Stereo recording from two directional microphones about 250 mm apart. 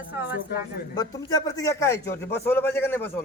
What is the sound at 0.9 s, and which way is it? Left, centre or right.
Speech, centre.